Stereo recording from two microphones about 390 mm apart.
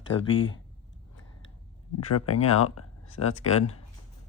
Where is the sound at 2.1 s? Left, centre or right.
Left.